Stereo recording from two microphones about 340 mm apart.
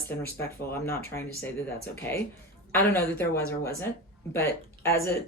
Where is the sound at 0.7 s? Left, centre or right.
Centre.